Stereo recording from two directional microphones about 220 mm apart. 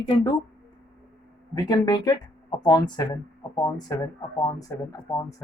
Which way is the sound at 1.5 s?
15° left (ahead or behind).